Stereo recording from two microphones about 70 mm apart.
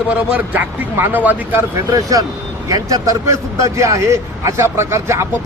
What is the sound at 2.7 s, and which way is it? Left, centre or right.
A man's voice, right.